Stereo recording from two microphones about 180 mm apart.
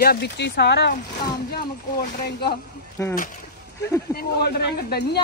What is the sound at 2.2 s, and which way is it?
Speech, 65° left (ahead or behind).